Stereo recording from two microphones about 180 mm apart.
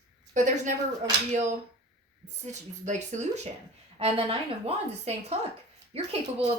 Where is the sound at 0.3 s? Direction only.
40° right (ahead or behind).